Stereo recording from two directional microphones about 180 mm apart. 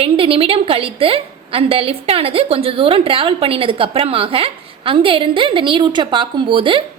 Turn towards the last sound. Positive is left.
turn(degrees=-30)  # may be behind; listen again after turning